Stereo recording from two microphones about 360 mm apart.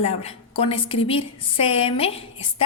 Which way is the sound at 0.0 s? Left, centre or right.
Centre.